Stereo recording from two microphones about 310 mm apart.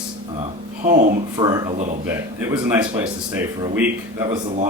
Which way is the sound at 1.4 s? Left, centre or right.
Centre.